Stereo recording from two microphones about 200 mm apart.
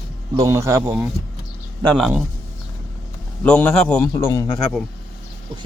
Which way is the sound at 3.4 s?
5° left (ahead or behind).